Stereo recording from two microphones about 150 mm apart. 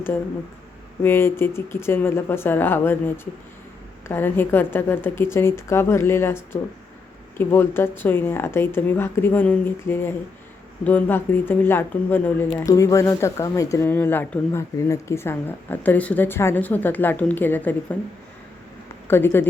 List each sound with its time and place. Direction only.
1.0 s speech: 15° left (ahead or behind)
4.1 s speech: 15° left (ahead or behind)
19.0 s speech: 15° left (ahead or behind)